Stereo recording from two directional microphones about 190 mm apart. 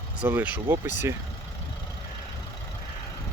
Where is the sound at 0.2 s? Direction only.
10° right (ahead or behind).